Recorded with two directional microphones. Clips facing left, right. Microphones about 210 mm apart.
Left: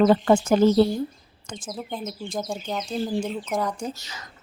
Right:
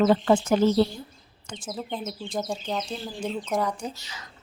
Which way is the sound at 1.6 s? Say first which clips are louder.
Even; centre (ahead or behind).